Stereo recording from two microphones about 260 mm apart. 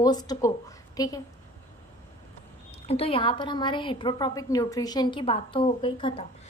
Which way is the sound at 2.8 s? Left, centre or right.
Left.